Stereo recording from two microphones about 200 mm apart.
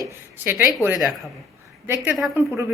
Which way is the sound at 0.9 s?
Centre (ahead or behind).